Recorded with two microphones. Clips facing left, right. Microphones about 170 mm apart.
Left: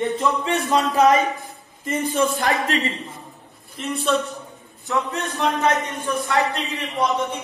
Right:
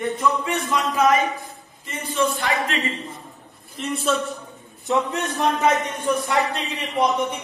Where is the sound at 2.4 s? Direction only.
40° left (ahead or behind).